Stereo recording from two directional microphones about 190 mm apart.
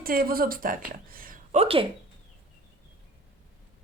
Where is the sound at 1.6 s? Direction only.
30° right (ahead or behind).